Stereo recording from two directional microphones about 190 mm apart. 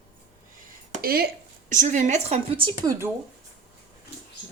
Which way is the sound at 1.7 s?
40° right (ahead or behind).